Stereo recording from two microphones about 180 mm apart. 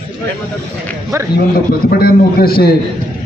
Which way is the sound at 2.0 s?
55° left (ahead or behind).